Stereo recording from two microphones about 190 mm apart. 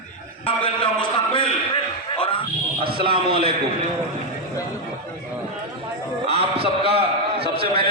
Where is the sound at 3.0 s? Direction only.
25° right (ahead or behind).